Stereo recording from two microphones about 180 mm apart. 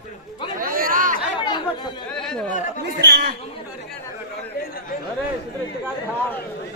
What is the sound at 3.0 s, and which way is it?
Chatter, 65° right (ahead or behind).